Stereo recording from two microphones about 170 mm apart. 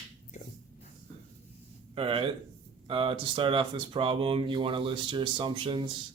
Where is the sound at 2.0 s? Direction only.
30° right (ahead or behind).